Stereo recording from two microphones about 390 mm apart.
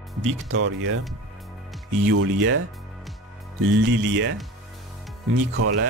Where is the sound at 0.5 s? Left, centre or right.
Right.